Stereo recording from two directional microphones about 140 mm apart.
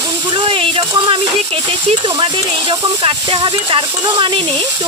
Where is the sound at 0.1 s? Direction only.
35° right (ahead or behind).